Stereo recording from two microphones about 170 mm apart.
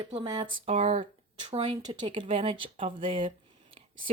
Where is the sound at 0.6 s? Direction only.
35° right (ahead or behind).